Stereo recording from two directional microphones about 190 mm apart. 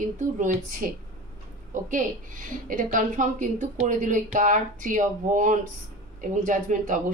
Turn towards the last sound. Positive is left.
turn(degrees=-45)  # may be behind; listen again after turning